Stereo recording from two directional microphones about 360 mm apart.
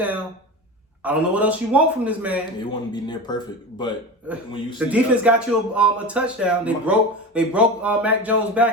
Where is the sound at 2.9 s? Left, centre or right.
Centre.